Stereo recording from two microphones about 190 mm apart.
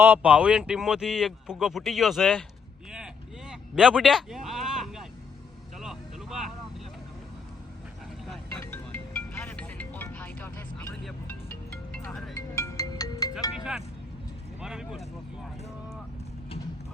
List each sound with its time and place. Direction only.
0.0 s speech: 10° right (ahead or behind)
3.5 s a sound: centre (ahead or behind)
5.8 s vehicle: centre (ahead or behind)
8.6 s music: 10° left (ahead or behind)
12.5 s music: 15° left (ahead or behind)
14.6 s a sound: 5° right (ahead or behind)